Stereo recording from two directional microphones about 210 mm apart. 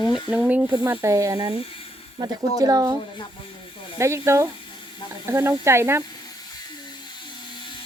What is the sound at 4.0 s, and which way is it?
Speech, 15° right (ahead or behind).